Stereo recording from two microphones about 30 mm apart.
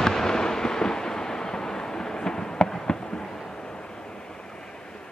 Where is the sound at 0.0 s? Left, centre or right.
Centre.